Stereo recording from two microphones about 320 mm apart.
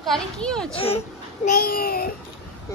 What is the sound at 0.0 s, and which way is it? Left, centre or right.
Speech, centre.